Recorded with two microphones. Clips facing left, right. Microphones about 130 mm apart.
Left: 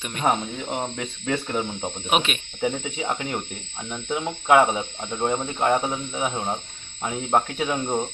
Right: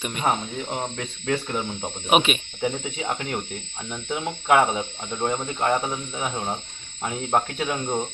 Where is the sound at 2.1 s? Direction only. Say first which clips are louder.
Right 4 dB; 5° right (ahead or behind).